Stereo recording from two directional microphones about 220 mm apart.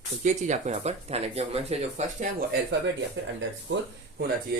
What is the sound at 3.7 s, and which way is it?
Speech, 55° right (ahead or behind).